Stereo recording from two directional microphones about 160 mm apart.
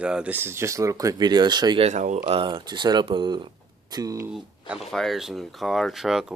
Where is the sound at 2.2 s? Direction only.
35° right (ahead or behind).